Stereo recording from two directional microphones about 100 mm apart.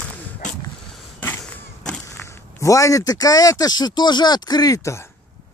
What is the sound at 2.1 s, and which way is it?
Speech, 30° left (ahead or behind).